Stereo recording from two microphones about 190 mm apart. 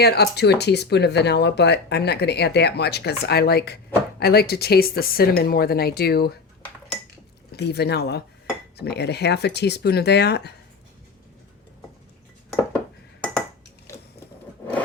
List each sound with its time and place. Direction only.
0.0 s speech: 60° left (ahead or behind)
7.5 s speech: 60° left (ahead or behind)